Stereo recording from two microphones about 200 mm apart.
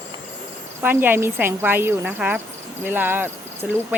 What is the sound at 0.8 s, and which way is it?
Speech, 10° right (ahead or behind).